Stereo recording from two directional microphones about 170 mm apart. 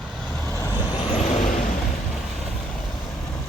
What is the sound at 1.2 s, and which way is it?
Vehicle, 40° left (ahead or behind).